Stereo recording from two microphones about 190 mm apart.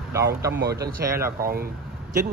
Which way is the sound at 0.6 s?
60° right (ahead or behind).